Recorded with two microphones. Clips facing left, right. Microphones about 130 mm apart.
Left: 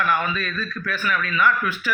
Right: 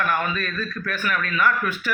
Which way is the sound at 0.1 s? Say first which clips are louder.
Left 1 dB; 45° right (ahead or behind).